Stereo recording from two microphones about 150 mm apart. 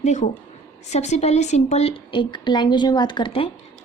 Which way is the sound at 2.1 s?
30° left (ahead or behind).